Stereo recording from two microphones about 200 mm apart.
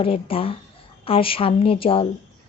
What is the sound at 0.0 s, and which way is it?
Speech, 30° left (ahead or behind).